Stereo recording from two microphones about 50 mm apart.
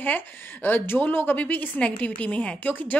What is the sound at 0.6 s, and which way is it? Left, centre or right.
Speech, left.